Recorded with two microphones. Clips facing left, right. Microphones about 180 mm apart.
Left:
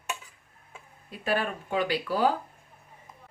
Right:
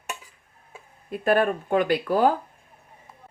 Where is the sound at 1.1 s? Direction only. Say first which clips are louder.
Right 8 dB; 50° right (ahead or behind).